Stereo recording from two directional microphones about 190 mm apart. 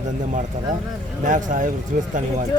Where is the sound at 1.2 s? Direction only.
45° right (ahead or behind).